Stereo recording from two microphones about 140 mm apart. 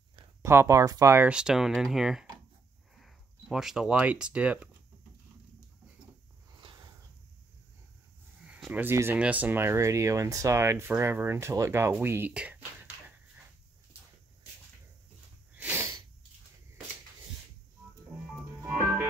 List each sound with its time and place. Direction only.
0.4 s speech: 20° right (ahead or behind)
1.3 s speech: 5° right (ahead or behind)
6.5 s a sound: 30° right (ahead or behind)
8.4 s a sound: 5° right (ahead or behind)
8.8 s speech: 15° right (ahead or behind)
15.5 s sneeze: 15° right (ahead or behind)
18.7 s music: 15° right (ahead or behind)